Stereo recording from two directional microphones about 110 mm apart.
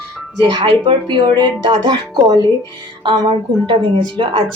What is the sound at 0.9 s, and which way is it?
A woman's voice, 45° right (ahead or behind).